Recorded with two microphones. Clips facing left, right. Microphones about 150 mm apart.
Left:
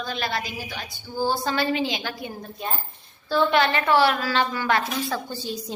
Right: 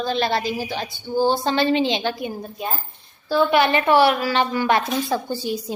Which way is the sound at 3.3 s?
10° right (ahead or behind).